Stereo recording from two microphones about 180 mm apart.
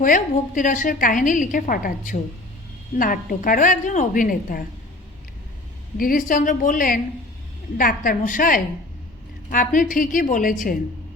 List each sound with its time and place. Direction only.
0.0 s a woman's voice: 45° left (ahead or behind)
6.0 s a woman's voice: 50° left (ahead or behind)